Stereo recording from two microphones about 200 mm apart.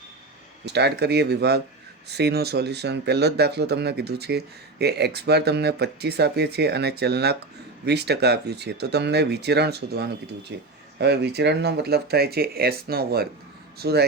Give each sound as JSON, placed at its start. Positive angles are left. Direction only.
{"t": 0.6, "sound": "speech", "side_deg": -55}